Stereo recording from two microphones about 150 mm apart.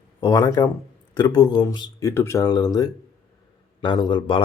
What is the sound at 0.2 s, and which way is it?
Speech, 25° left (ahead or behind).